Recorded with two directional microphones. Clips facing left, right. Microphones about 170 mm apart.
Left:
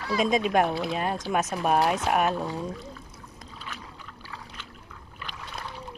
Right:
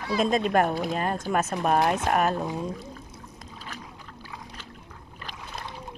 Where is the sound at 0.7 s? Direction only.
45° right (ahead or behind).